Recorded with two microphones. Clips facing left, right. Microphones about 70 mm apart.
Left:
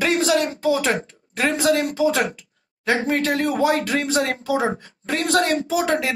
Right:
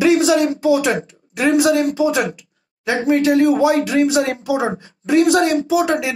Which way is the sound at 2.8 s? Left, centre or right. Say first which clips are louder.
Right 5 dB; left.